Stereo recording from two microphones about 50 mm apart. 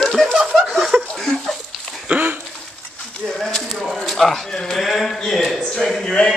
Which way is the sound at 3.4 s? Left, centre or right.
Centre.